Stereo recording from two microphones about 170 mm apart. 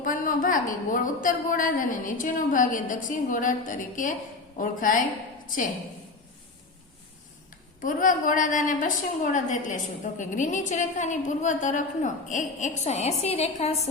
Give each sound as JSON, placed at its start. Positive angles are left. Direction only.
{"t": 0.0, "sound": "a woman's voice", "side_deg": 55}
{"t": 7.8, "sound": "a woman's voice", "side_deg": 50}